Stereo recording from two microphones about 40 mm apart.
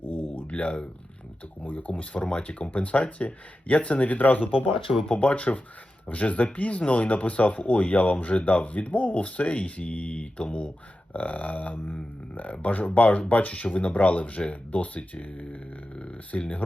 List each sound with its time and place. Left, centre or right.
0.0 s a sound: left
0.5 s speech: left
5.0 s speech: left
11.1 s speech: left